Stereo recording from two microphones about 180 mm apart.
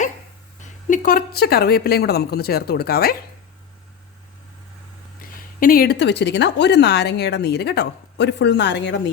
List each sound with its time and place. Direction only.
0.6 s speech: 45° left (ahead or behind)
5.2 s speech: 50° left (ahead or behind); by 9.0 s 75° left (ahead or behind)